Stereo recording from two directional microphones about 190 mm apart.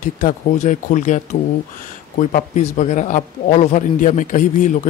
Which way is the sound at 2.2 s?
40° left (ahead or behind).